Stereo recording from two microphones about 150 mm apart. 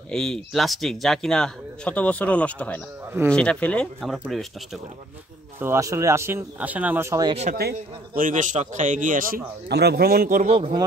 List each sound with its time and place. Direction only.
0.1 s speech: 5° left (ahead or behind)
5.6 s speech: 20° right (ahead or behind)
7.5 s speech: 90° right
8.2 s a man's voice: 60° right (ahead or behind)
9.7 s speech: 90° right
10.4 s a man's voice: 45° right (ahead or behind)